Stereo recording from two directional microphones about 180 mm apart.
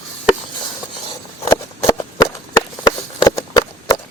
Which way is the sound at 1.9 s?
20° left (ahead or behind).